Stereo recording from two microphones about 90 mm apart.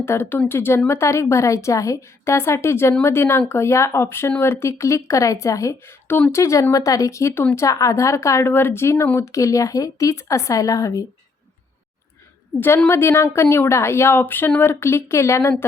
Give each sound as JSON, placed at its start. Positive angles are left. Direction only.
{"t": 0.0, "sound": "a woman's voice", "side_deg": 25}
{"t": 12.5, "sound": "a woman's voice", "side_deg": 25}